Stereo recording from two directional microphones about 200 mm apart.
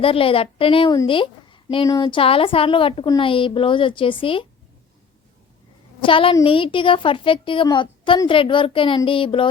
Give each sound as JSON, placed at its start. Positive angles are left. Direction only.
{"t": 0.0, "sound": "a woman's voice", "side_deg": 25}
{"t": 6.1, "sound": "a woman's voice", "side_deg": 25}